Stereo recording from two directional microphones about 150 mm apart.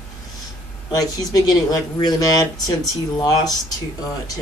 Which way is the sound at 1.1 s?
25° left (ahead or behind).